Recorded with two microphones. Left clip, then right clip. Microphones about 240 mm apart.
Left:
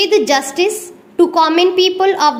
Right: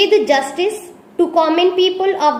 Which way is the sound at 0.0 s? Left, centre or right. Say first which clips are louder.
Even; left.